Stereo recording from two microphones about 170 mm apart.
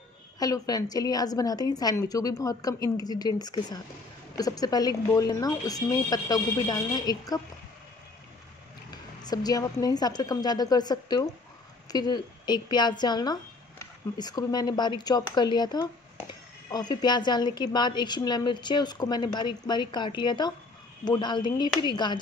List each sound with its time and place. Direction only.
0.4 s speech: 20° left (ahead or behind)
8.9 s speech: 25° left (ahead or behind)